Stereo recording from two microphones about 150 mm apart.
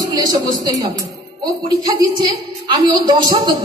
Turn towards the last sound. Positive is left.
turn(degrees=-25)  # may be behind; listen again after turning